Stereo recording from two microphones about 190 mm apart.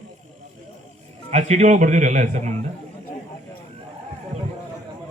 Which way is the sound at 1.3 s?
35° right (ahead or behind).